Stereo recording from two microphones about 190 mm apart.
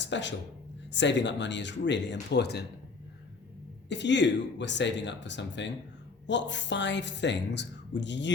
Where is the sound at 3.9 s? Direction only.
65° left (ahead or behind).